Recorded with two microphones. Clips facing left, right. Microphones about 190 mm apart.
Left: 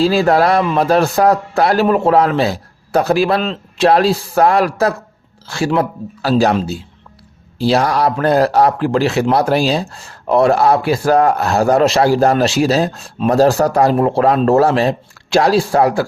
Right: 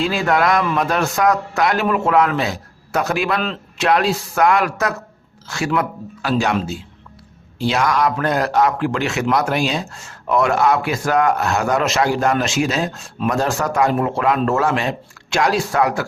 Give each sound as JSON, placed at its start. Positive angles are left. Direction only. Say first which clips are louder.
{"t": 0.0, "sound": "speech", "louder": "left 6 dB", "side_deg": 35}